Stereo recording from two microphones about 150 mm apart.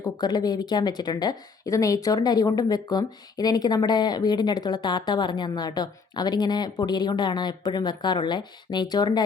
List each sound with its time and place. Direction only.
0.0 s speech: 25° left (ahead or behind)